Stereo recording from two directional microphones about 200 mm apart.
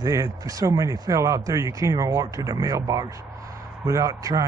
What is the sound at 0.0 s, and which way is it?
Speech, 15° right (ahead or behind).